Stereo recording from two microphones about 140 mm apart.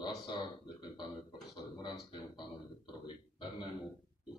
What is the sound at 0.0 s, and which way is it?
Speech, 30° left (ahead or behind).